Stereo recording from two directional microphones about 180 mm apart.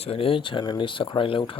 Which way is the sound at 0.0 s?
30° left (ahead or behind).